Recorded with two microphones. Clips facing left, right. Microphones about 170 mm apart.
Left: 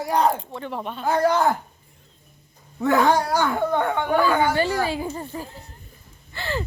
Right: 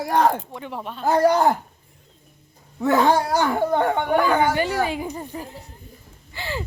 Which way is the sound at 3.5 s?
30° right (ahead or behind).